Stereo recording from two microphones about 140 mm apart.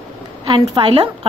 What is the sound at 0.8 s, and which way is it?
Speech, 40° right (ahead or behind).